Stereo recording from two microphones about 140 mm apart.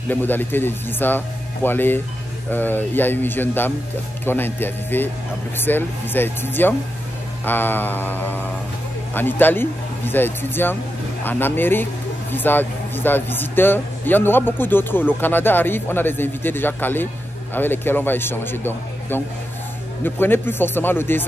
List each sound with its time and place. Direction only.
0.1 s a man's voice: 15° left (ahead or behind)